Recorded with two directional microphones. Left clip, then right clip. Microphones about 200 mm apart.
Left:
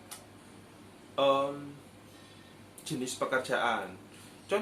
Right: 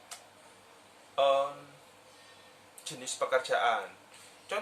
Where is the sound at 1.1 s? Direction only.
10° right (ahead or behind).